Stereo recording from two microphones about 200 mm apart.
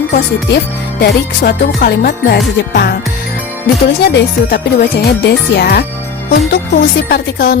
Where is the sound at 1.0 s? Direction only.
50° left (ahead or behind).